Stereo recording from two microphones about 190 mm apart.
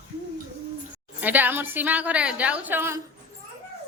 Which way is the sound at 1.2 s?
10° right (ahead or behind).